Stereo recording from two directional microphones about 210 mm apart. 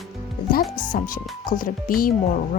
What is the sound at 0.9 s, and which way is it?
Speech, 40° left (ahead or behind).